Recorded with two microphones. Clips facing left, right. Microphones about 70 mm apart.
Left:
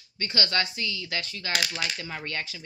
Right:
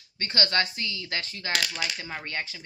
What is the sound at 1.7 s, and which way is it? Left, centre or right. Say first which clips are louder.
Speech: even; centre.